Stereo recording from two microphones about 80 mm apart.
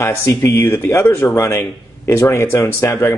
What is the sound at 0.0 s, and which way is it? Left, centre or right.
Speech, left.